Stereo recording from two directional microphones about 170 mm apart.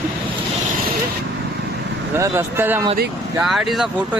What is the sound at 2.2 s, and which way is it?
Speech, 15° right (ahead or behind).